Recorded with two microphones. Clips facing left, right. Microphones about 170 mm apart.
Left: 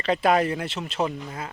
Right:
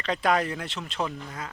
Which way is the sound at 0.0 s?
5° left (ahead or behind).